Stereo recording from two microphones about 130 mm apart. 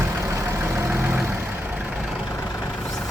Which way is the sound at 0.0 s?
20° right (ahead or behind).